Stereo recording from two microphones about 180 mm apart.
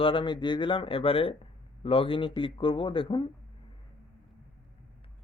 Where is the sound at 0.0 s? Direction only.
30° left (ahead or behind).